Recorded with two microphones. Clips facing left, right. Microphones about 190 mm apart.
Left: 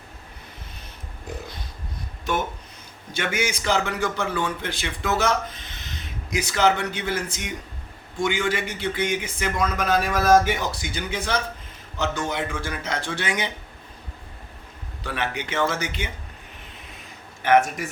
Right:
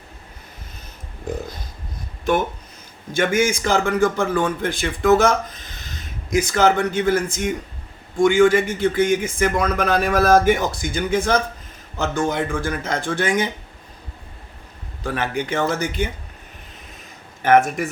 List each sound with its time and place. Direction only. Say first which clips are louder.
3.1 s a man's voice: right 8 dB; 50° right (ahead or behind)
15.0 s a man's voice: right 5 dB; 45° right (ahead or behind)
17.4 s a man's voice: right 3 dB; 50° right (ahead or behind)